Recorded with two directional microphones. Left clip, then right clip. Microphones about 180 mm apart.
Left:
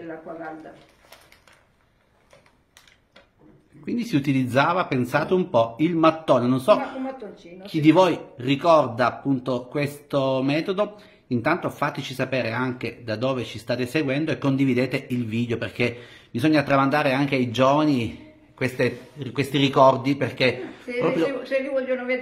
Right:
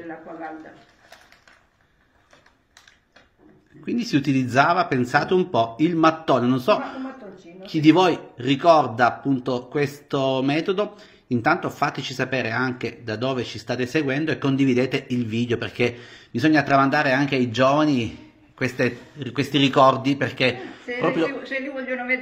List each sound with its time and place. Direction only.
3.8 s a man's voice: centre (ahead or behind)
21.3 s a man's voice: 25° left (ahead or behind)